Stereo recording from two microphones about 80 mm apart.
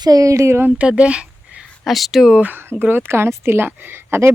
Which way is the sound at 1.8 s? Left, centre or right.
Centre.